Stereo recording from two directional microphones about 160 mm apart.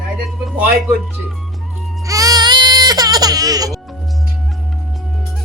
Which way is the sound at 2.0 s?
20° right (ahead or behind).